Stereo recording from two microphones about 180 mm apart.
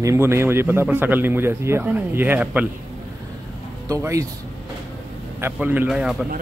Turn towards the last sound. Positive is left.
turn(degrees=-5)  # may be behind; listen again after turning